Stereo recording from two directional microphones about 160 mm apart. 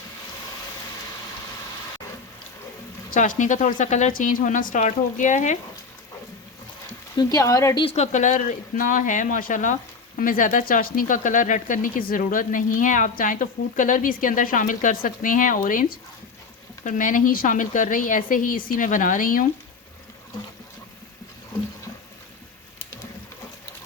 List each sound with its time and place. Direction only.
3.1 s speech: 55° left (ahead or behind)
7.2 s speech: 20° left (ahead or behind)
7.9 s speech: 45° left (ahead or behind)